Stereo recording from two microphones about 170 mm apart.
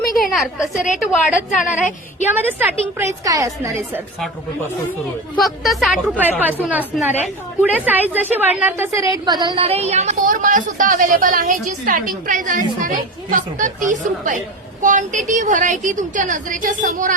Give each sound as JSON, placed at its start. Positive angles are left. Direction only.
{"t": 0.1, "sound": "a sound", "side_deg": 0}
{"t": 0.9, "sound": "a woman's voice", "side_deg": 0}
{"t": 5.4, "sound": "a woman's voice", "side_deg": 0}
{"t": 9.0, "sound": "a woman's voice", "side_deg": -20}